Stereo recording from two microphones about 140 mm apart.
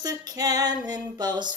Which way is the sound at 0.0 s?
25° right (ahead or behind).